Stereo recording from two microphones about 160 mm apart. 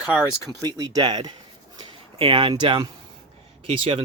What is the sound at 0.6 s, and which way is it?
Speech, 25° right (ahead or behind).